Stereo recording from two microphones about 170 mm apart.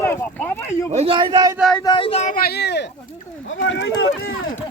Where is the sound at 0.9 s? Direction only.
35° right (ahead or behind).